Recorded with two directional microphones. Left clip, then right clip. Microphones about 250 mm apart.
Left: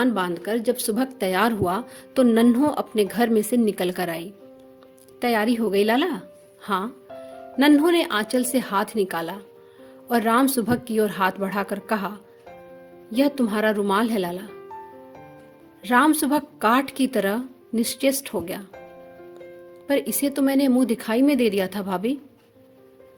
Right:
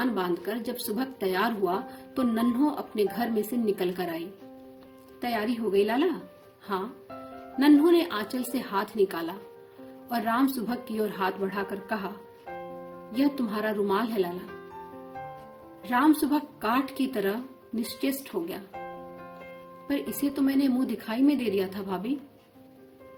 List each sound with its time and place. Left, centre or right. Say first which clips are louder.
0.0 s speech: left 5 dB; left
5.2 s speech: left 8 dB; left
7.6 s speech: left 3 dB; left
13.1 s speech: left 6 dB; left
15.8 s speech: left 5 dB; left
19.9 s speech: left 7 dB; left